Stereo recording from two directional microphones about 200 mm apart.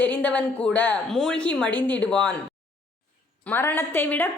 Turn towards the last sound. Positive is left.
turn(degrees=10)  # may be behind; listen again after turning